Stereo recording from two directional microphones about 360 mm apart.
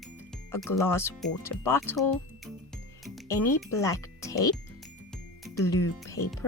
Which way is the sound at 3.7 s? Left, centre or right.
Centre.